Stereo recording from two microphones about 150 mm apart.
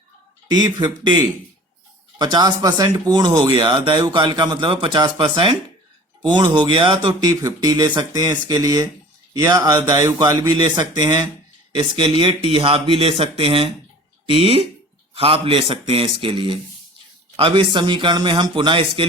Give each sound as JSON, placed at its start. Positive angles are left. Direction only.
{"t": 0.8, "sound": "speech", "side_deg": -30}